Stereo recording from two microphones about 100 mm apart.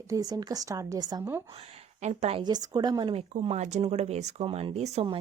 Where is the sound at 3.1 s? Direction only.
90° right.